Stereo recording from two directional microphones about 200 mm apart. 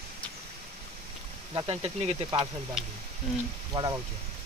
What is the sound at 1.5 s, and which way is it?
Speech, 25° right (ahead or behind).